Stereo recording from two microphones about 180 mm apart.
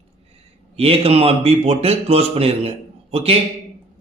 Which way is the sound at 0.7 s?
30° right (ahead or behind).